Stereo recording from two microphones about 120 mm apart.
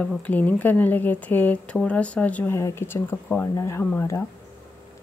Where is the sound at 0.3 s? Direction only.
15° left (ahead or behind).